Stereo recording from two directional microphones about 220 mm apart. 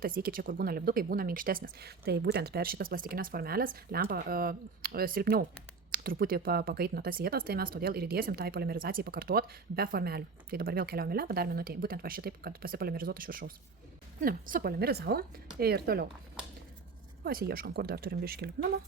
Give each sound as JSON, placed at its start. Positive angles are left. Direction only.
{"t": 0.0, "sound": "speech", "side_deg": -40}
{"t": 17.2, "sound": "speech", "side_deg": -45}